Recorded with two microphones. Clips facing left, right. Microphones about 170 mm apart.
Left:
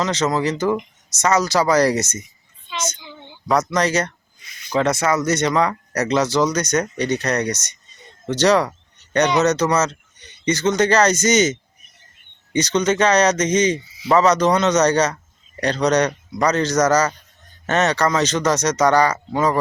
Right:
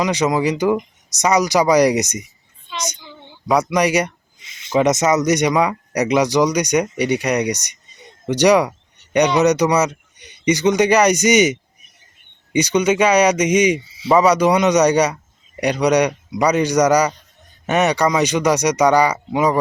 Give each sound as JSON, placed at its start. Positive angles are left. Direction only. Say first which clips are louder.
{"t": 0.0, "sound": "speech", "louder": "right 2 dB", "side_deg": -15}
{"t": 3.0, "sound": "a sound", "louder": "left 1 dB", "side_deg": 0}
{"t": 3.4, "sound": "speech", "louder": "right 2 dB", "side_deg": -10}
{"t": 12.5, "sound": "speech", "louder": "right 2 dB", "side_deg": -10}
{"t": 13.8, "sound": "a sound", "louder": "right 3 dB", "side_deg": -25}
{"t": 14.1, "sound": "speech", "louder": "right 2 dB", "side_deg": -10}